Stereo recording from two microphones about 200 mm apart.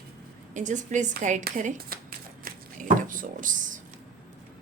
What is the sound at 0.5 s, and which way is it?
Speech, 40° right (ahead or behind).